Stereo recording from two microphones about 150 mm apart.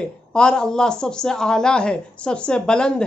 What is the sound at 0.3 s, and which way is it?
Speech, 5° left (ahead or behind).